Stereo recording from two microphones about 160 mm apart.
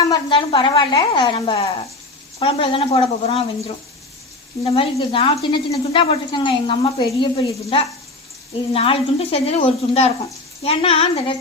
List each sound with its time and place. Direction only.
0.0 s speech: 25° left (ahead or behind)